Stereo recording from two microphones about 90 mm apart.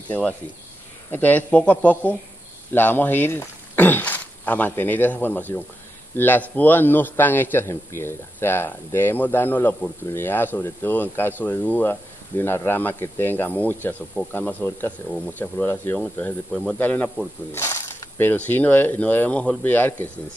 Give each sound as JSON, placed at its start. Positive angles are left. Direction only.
{"t": 0.1, "sound": "a man's voice", "side_deg": 15}
{"t": 16.0, "sound": "a man's voice", "side_deg": 15}
{"t": 17.5, "sound": "a man's voice", "side_deg": 30}